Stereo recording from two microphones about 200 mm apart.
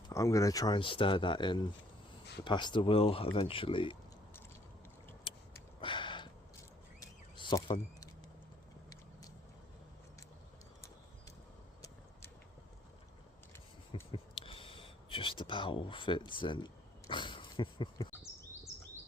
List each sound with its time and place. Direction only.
0.1 s speech: 15° left (ahead or behind)
5.3 s vehicle: 25° left (ahead or behind)
5.8 s a sound: 25° left (ahead or behind)
13.9 s whispering: 25° left (ahead or behind)